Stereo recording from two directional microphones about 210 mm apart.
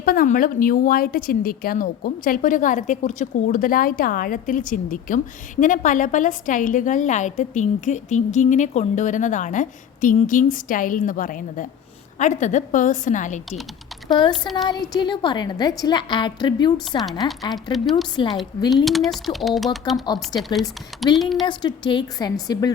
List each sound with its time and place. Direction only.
0.0 s a woman's voice: 45° left (ahead or behind)
14.1 s a woman's voice: 20° left (ahead or behind)
18.9 s speech: centre (ahead or behind)
21.4 s a woman's voice: 20° left (ahead or behind)